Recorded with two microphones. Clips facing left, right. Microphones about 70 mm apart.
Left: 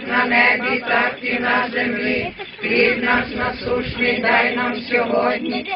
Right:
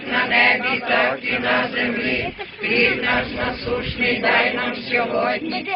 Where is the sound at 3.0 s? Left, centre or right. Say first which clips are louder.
Left 2 dB; centre.